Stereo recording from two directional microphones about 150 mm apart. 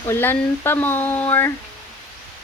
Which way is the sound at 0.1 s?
15° left (ahead or behind).